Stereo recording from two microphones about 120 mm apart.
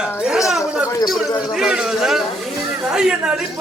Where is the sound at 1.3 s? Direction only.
35° left (ahead or behind).